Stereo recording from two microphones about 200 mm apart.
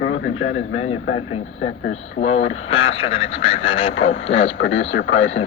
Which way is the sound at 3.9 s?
90° left.